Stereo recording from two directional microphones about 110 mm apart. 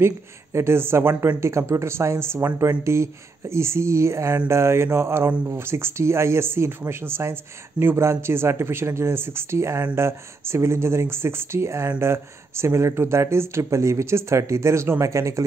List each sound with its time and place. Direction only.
0.0 s speech: 25° right (ahead or behind)